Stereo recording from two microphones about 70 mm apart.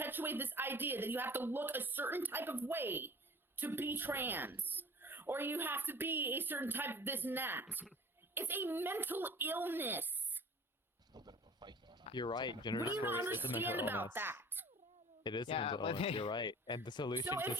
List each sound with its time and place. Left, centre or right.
0.0 s a woman's voice: right
11.1 s a sound: right
12.1 s speech: left
13.1 s a woman's voice: right
15.2 s speech: left
17.2 s speech: right